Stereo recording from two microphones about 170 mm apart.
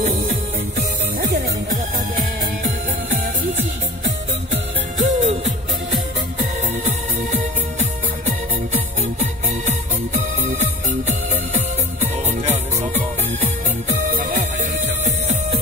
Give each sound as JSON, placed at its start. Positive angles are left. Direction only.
{"t": 0.1, "sound": "music", "side_deg": -45}
{"t": 1.2, "sound": "music", "side_deg": -65}
{"t": 5.0, "sound": "music", "side_deg": -40}
{"t": 6.8, "sound": "music", "side_deg": -40}
{"t": 8.7, "sound": "music", "side_deg": -40}
{"t": 14.1, "sound": "music", "side_deg": -45}